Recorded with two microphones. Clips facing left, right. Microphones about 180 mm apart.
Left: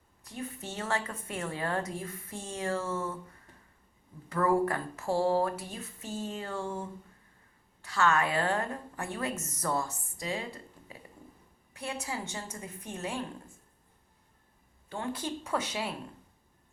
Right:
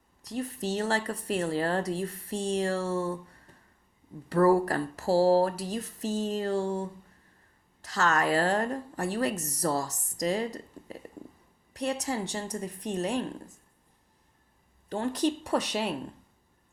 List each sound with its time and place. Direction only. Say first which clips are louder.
0.3 s a woman's voice: right 8 dB; 40° right (ahead or behind)
2.3 s speech: right 14 dB; 75° right (ahead or behind)
2.6 s a woman's voice: right 1 dB; 35° right (ahead or behind)
6.0 s speech: right 7 dB; 85° right
6.2 s a woman's voice: right 7 dB; 40° right (ahead or behind)
14.8 s a woman's voice: right 8 dB; 40° right (ahead or behind)